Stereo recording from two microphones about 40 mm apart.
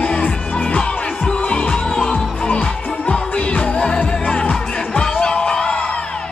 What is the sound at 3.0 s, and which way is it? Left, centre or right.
Music, left.